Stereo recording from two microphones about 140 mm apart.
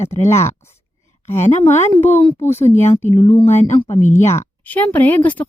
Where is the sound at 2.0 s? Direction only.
15° left (ahead or behind).